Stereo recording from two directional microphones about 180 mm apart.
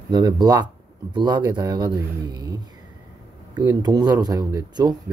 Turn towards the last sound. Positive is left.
turn(degrees=-20)  # may be behind; listen again after turning